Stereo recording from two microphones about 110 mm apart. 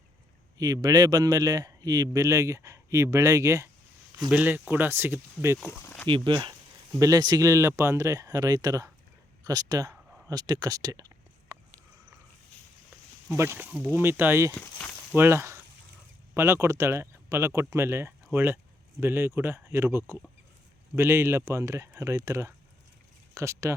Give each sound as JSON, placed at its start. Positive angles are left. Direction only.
{"t": 0.6, "sound": "speech", "side_deg": -35}
{"t": 4.3, "sound": "speech", "side_deg": -15}
{"t": 6.1, "sound": "speech", "side_deg": -50}
{"t": 10.2, "sound": "a sound", "side_deg": -35}
{"t": 13.3, "sound": "speech", "side_deg": -25}
{"t": 14.5, "sound": "speech", "side_deg": 15}
{"t": 15.1, "sound": "speech", "side_deg": -20}